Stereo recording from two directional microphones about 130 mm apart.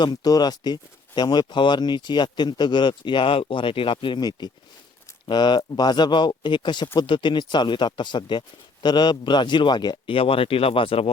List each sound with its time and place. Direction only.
0.0 s speech: 35° left (ahead or behind)